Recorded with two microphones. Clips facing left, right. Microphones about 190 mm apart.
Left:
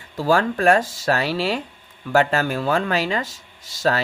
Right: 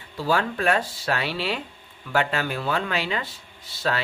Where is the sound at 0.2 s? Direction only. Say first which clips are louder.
Left 5 dB; 45° left (ahead or behind).